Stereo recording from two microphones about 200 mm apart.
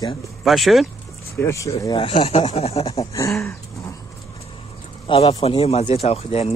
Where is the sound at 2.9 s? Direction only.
15° left (ahead or behind).